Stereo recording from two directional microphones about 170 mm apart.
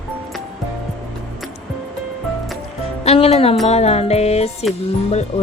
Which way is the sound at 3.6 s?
40° left (ahead or behind).